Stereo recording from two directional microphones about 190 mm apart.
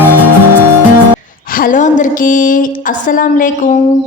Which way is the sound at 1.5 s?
45° left (ahead or behind).